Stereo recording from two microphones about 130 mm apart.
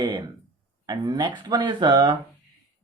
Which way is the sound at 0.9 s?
35° right (ahead or behind).